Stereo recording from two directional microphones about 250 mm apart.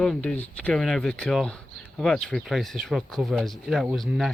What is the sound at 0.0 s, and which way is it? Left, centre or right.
Speech, centre.